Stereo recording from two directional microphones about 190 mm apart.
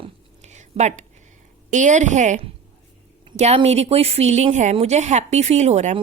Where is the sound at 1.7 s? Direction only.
40° right (ahead or behind).